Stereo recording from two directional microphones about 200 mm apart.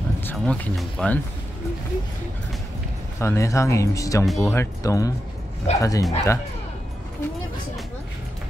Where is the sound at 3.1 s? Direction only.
15° left (ahead or behind).